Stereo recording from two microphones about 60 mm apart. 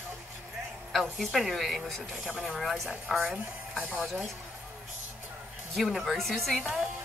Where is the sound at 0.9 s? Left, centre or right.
Centre.